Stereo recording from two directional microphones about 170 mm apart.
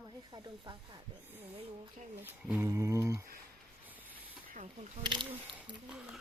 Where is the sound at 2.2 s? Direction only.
10° right (ahead or behind).